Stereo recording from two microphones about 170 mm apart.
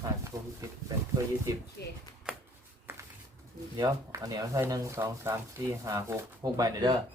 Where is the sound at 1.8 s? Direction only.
70° left (ahead or behind).